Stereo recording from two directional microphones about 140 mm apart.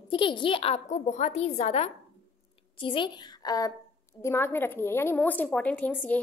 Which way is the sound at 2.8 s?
35° left (ahead or behind).